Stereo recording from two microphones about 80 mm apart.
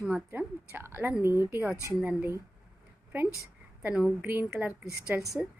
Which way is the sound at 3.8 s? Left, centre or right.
Centre.